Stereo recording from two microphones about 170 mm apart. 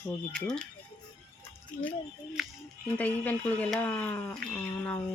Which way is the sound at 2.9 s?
10° left (ahead or behind).